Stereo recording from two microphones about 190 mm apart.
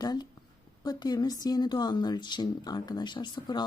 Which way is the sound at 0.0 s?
20° left (ahead or behind).